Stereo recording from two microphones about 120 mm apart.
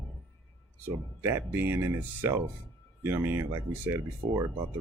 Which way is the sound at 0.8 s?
20° right (ahead or behind).